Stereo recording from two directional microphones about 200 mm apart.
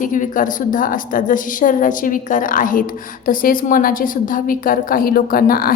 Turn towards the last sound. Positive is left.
turn(degrees=45)  # may be behind; listen again after turning